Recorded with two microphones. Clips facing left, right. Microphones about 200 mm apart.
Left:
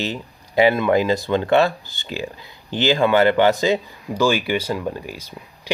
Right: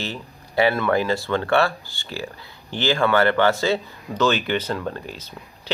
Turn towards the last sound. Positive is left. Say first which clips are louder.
# left 2 dB
turn(degrees=10)  # may be behind; listen again after turning